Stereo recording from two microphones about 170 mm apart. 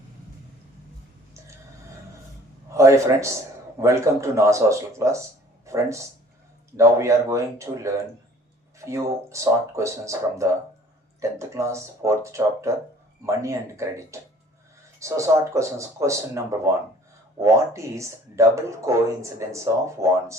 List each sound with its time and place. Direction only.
2.7 s a man's voice: 15° right (ahead or behind)